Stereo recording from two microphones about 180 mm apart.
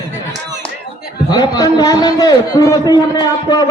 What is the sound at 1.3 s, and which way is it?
A man's voice, 25° left (ahead or behind).